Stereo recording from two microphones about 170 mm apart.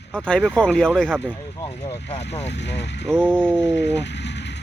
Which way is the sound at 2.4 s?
90° left.